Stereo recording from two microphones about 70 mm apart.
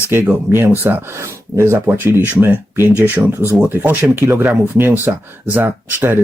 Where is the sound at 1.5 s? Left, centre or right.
Right.